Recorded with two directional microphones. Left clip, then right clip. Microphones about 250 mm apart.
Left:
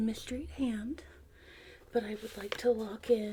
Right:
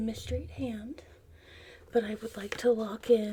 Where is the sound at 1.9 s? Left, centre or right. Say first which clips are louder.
Right 4 dB; right.